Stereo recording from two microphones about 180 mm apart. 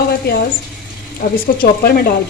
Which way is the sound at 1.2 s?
50° left (ahead or behind).